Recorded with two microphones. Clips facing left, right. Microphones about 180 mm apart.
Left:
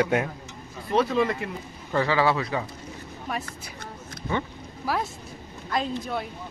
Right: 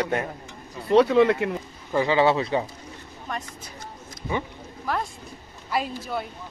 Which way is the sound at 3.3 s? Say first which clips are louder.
Left 1 dB; 5° left (ahead or behind).